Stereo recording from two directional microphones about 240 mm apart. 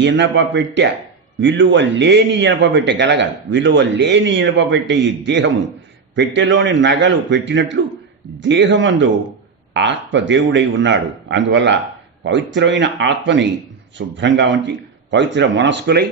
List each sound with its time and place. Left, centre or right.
0.0 s a man's voice: right